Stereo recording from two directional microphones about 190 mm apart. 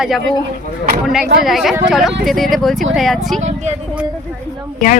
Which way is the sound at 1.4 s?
Centre (ahead or behind).